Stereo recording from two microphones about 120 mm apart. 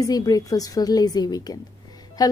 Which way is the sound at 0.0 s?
30° left (ahead or behind).